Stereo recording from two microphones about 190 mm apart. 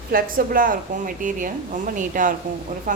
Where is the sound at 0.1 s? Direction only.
50° right (ahead or behind).